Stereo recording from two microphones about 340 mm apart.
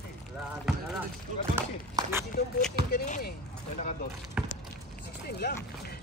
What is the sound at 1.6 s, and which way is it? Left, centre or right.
Speech, centre.